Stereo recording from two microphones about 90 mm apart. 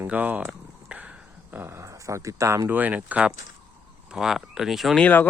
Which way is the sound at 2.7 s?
15° right (ahead or behind).